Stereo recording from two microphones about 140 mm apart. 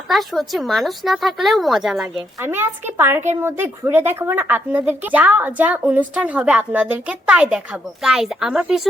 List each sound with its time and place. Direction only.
0.1 s a woman's voice: centre (ahead or behind)
2.4 s speech: 15° right (ahead or behind)